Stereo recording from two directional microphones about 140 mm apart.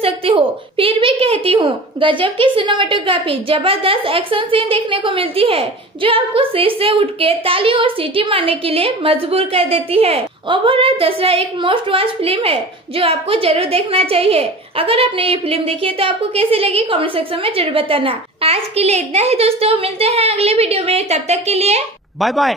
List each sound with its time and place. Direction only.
0.0 s a woman's voice: 40° right (ahead or behind)
22.2 s speech: centre (ahead or behind)